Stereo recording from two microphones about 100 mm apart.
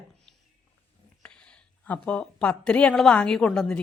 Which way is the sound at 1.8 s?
15° left (ahead or behind).